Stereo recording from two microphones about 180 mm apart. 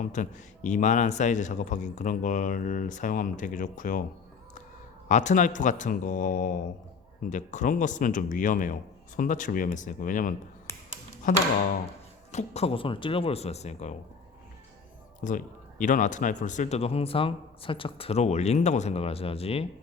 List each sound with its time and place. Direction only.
0.0 s a man's voice: 45° left (ahead or behind)
5.0 s a man's voice: 40° left (ahead or behind)
10.7 s a sound: 15° left (ahead or behind)
12.3 s speech: 40° left (ahead or behind)
15.2 s speech: 45° left (ahead or behind)